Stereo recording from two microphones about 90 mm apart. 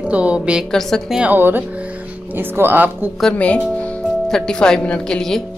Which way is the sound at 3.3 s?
15° left (ahead or behind).